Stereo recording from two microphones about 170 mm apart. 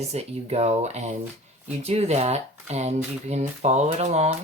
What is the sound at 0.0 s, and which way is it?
Speech, 40° right (ahead or behind).